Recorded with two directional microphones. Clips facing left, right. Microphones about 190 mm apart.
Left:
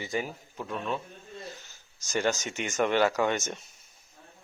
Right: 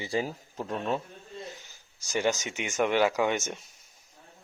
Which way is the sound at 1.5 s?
15° right (ahead or behind).